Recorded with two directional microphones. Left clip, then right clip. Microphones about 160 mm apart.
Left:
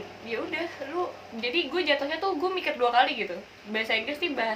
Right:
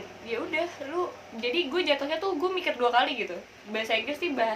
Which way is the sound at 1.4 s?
10° right (ahead or behind).